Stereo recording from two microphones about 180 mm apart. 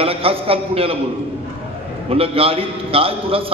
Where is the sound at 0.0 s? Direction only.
30° right (ahead or behind).